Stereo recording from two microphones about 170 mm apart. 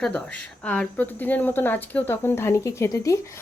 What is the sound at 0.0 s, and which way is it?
Speech, 5° left (ahead or behind).